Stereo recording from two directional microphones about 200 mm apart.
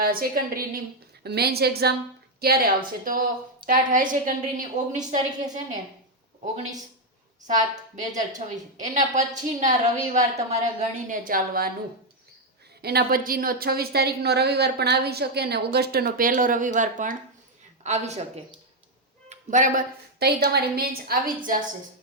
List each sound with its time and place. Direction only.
0.0 s a woman's voice: 45° right (ahead or behind)
7.4 s a woman's voice: 40° right (ahead or behind)
12.8 s a woman's voice: 50° right (ahead or behind); by 18.3 s 35° right (ahead or behind)
19.3 s a woman's voice: 40° right (ahead or behind)